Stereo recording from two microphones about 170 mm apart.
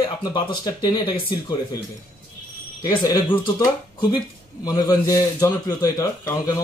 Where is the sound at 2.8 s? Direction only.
25° left (ahead or behind).